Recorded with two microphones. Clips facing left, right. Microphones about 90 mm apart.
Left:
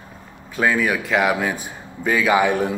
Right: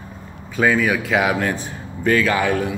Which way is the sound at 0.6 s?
Centre (ahead or behind).